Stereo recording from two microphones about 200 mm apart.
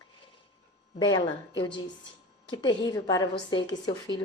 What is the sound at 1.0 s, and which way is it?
A woman's voice, 25° left (ahead or behind).